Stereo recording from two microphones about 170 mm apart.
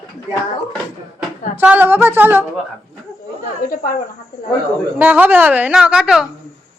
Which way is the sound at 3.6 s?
55° left (ahead or behind).